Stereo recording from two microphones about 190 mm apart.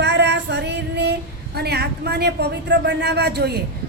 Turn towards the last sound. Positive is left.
turn(degrees=-60)  # may be behind; listen again after turning